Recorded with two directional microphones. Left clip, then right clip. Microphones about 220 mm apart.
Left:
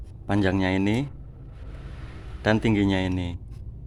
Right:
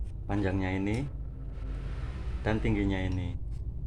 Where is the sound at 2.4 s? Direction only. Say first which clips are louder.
Left 8 dB; 50° left (ahead or behind).